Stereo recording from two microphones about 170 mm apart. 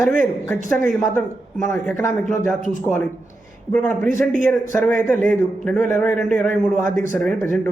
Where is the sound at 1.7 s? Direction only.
15° left (ahead or behind).